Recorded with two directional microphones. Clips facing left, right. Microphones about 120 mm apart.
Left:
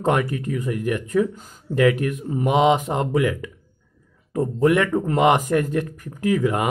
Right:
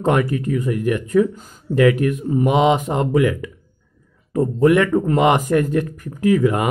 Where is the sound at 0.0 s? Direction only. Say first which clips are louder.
Right 3 dB; 20° left (ahead or behind).